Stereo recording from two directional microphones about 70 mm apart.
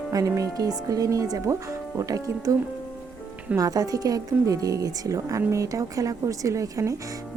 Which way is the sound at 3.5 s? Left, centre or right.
Right.